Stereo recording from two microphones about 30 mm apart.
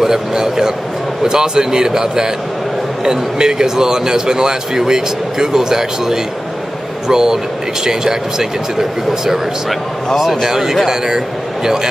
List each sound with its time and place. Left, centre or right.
0.0 s a man's voice: right
10.4 s a man's voice: centre